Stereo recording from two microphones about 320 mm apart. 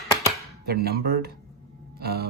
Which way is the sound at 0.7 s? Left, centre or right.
Right.